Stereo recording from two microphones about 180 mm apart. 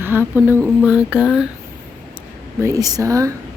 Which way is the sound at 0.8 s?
5° right (ahead or behind).